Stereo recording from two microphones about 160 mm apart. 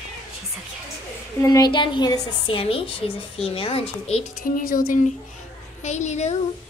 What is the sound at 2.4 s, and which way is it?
A woman's voice, 35° left (ahead or behind).